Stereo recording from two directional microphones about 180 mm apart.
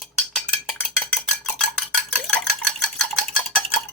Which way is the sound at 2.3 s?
5° left (ahead or behind).